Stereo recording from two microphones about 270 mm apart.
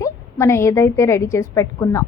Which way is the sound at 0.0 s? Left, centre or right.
Centre.